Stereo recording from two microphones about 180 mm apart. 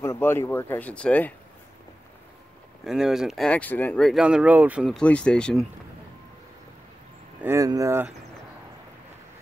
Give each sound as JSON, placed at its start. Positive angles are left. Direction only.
{"t": 0.0, "sound": "speech", "side_deg": 15}
{"t": 2.8, "sound": "speech", "side_deg": 0}
{"t": 7.4, "sound": "speech", "side_deg": -20}